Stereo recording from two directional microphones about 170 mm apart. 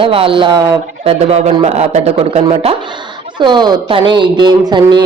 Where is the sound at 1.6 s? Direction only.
40° right (ahead or behind).